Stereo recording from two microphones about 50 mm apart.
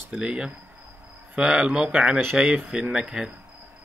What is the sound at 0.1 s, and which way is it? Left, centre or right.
Speech, centre.